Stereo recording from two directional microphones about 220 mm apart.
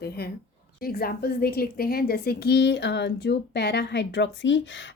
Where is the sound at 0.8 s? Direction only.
45° left (ahead or behind).